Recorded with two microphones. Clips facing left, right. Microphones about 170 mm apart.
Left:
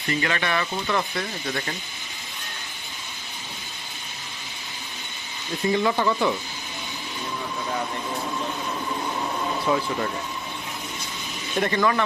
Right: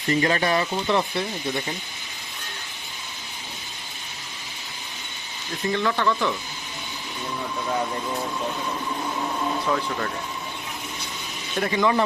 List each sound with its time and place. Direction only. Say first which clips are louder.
0.1 s speech: right 4 dB; 35° right (ahead or behind); by 1.7 s 15° right (ahead or behind)
5.6 s speech: left 1 dB; 15° left (ahead or behind)
9.6 s speech: left 2 dB; 15° left (ahead or behind)
11.6 s speech: right 1 dB; 10° right (ahead or behind)